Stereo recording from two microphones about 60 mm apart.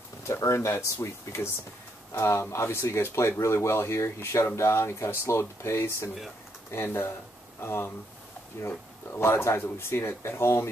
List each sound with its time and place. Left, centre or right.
0.3 s speech: left